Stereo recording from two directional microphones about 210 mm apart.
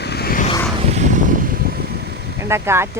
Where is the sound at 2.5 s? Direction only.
10° right (ahead or behind).